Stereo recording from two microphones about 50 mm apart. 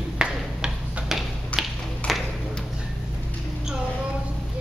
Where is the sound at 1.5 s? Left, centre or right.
Left.